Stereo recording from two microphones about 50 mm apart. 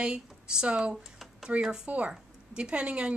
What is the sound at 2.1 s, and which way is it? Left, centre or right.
A woman's voice, right.